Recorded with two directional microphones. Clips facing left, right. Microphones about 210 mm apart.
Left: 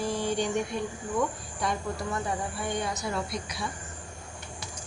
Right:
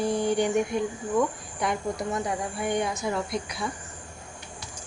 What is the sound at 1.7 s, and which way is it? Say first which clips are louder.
Speech: right 3 dB; 20° right (ahead or behind).